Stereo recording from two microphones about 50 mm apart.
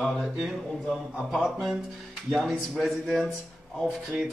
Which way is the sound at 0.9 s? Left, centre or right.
Centre.